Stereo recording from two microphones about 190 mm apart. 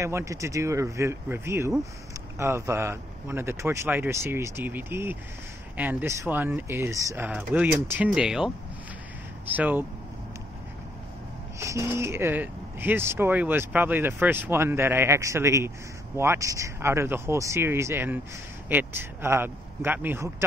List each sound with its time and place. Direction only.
0.0 s speech: 15° right (ahead or behind)
9.5 s speech: 10° right (ahead or behind)
11.6 s speech: 15° right (ahead or behind)